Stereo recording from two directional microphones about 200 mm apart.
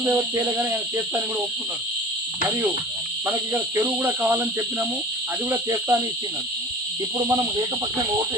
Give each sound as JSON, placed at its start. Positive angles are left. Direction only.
{"t": 0.0, "sound": "speech", "side_deg": -10}
{"t": 3.2, "sound": "speech", "side_deg": -10}